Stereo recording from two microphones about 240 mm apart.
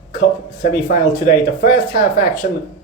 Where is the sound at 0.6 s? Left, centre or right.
Left.